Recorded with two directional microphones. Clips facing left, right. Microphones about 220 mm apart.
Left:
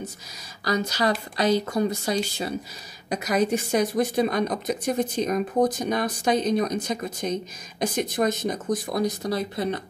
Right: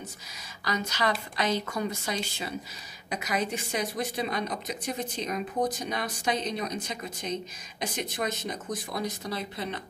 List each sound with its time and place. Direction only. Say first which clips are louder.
0.7 s a woman's voice: left 5 dB; 35° left (ahead or behind)